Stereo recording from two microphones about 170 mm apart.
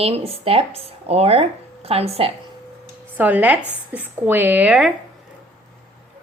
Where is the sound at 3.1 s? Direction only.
10° right (ahead or behind).